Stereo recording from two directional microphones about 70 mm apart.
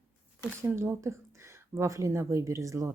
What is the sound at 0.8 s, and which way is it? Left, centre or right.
Speech, right.